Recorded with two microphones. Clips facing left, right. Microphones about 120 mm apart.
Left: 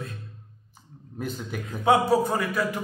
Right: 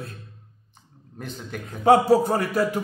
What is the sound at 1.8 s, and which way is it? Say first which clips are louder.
Speech: right 4 dB; 40° right (ahead or behind).